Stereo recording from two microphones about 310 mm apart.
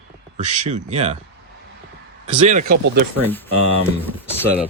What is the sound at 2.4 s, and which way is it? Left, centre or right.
Speech, right.